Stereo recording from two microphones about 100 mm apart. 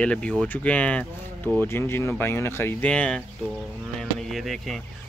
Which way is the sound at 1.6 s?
25° left (ahead or behind).